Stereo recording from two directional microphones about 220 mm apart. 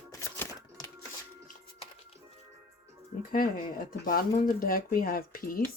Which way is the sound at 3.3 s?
40° left (ahead or behind).